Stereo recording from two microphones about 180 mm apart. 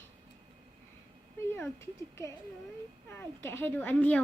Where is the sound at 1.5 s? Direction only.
15° left (ahead or behind).